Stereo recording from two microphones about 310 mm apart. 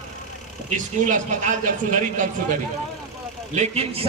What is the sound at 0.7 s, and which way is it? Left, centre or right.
A man's voice, right.